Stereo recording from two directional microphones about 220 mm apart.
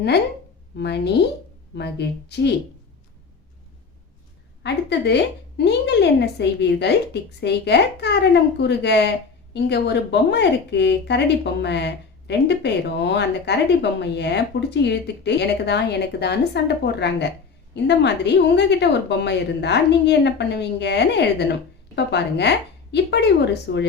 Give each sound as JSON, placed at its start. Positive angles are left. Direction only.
{"t": 0.8, "sound": "a woman's voice", "side_deg": 50}
{"t": 4.6, "sound": "a woman's voice", "side_deg": 50}